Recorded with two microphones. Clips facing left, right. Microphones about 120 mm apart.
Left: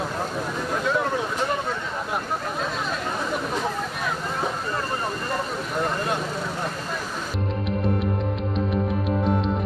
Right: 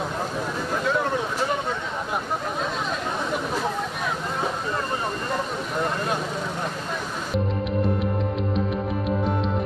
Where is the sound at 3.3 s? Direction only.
Centre (ahead or behind).